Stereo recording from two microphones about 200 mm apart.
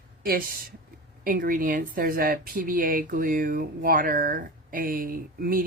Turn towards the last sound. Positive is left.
turn(degrees=-45)  # may be behind; listen again after turning